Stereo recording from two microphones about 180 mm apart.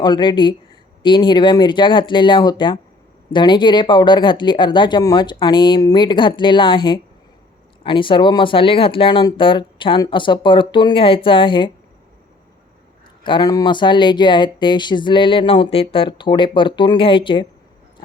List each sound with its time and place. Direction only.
0.0 s speech: 25° left (ahead or behind)
13.2 s speech: 25° left (ahead or behind)